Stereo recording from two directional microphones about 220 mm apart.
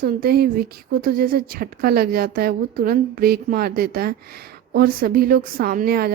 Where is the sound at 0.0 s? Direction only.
40° right (ahead or behind).